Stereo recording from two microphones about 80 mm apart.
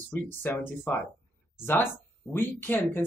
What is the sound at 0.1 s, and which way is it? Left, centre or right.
Speech, left.